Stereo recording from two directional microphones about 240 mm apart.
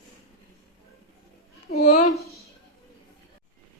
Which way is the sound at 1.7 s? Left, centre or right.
Left.